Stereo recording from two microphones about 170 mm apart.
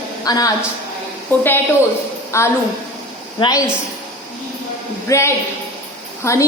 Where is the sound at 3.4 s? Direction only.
30° left (ahead or behind).